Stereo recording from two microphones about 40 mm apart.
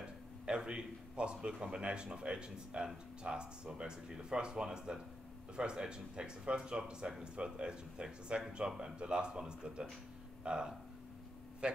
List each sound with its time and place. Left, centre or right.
0.5 s a man's voice: right